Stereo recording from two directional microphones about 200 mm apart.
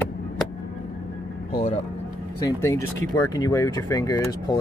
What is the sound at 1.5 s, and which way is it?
Speech, 30° left (ahead or behind).